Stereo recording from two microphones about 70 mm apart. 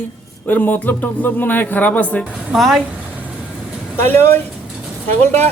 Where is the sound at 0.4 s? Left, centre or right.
Left.